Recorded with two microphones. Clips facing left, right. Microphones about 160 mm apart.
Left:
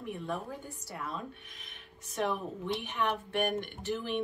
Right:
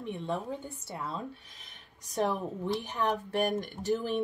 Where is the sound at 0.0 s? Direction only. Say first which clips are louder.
Right 3 dB; 25° right (ahead or behind); by 4.2 s 40° right (ahead or behind).